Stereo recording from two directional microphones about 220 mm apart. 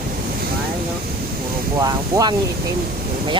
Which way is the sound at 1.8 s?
15° right (ahead or behind).